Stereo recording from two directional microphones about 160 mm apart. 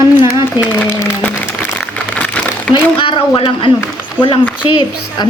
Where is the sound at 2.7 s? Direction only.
30° left (ahead or behind).